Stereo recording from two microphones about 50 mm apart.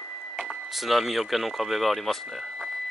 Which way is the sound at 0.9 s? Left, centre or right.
Centre.